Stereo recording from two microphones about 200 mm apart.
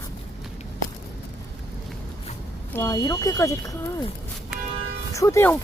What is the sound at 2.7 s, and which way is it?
Speech, 15° left (ahead or behind).